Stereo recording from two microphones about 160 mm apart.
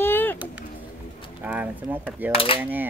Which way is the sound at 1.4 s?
10° right (ahead or behind).